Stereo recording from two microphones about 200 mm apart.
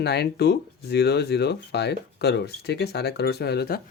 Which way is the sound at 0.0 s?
55° left (ahead or behind).